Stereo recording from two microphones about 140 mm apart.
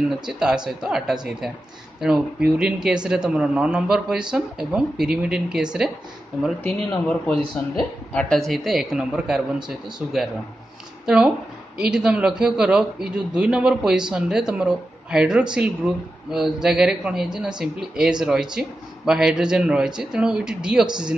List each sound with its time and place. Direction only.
0.3 s speech: 5° right (ahead or behind)
6.6 s a man's voice: 10° left (ahead or behind); by 20.9 s 5° right (ahead or behind)